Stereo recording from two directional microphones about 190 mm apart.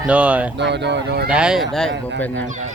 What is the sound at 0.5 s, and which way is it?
Speech, 65° right (ahead or behind).